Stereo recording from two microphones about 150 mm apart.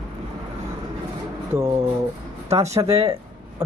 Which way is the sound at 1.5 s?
25° right (ahead or behind).